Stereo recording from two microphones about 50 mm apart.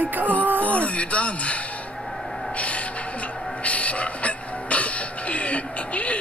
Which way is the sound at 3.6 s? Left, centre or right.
Left.